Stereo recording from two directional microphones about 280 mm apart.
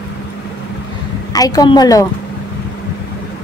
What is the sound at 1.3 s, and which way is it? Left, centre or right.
Speech, centre.